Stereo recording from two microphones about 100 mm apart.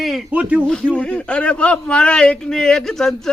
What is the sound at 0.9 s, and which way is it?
A man's voice, 10° left (ahead or behind).